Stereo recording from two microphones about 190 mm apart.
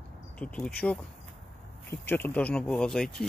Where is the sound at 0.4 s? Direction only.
5° left (ahead or behind).